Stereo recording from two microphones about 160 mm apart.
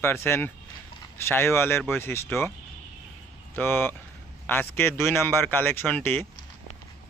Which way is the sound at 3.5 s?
15° left (ahead or behind).